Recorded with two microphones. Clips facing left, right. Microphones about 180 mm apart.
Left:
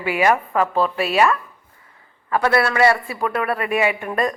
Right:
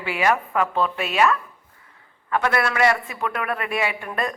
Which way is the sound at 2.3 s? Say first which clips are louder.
Left 4 dB; 35° left (ahead or behind).